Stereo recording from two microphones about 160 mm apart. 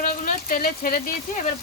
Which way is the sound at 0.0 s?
60° left (ahead or behind).